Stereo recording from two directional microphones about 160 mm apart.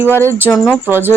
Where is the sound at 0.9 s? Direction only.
15° right (ahead or behind).